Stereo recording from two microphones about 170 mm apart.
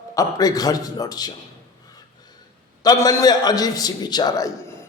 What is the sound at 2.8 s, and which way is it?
A man's voice, 20° left (ahead or behind).